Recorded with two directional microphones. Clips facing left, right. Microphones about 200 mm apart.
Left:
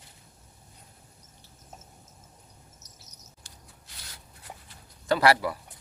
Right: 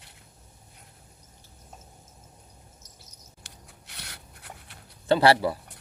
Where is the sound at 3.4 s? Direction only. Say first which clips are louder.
Right 5 dB; 70° right (ahead or behind).